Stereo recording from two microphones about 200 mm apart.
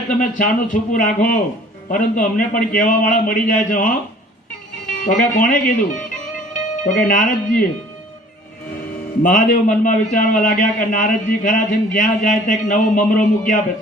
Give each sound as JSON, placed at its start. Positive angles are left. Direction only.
{"t": 0.1, "sound": "a man's voice", "side_deg": 40}
{"t": 4.9, "sound": "speech", "side_deg": 40}
{"t": 9.2, "sound": "a man's voice", "side_deg": 40}